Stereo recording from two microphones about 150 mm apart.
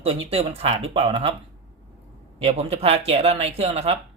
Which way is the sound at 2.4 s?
45° right (ahead or behind).